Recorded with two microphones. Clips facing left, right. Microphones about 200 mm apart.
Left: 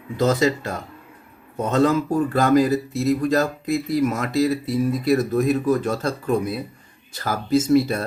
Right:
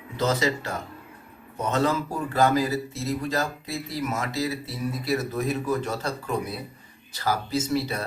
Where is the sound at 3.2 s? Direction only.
55° left (ahead or behind).